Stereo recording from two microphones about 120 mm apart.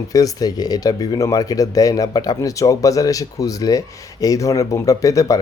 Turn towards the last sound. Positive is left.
turn(degrees=30)  # may be behind; listen again after turning